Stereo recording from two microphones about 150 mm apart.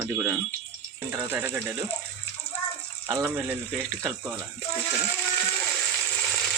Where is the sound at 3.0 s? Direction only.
20° right (ahead or behind).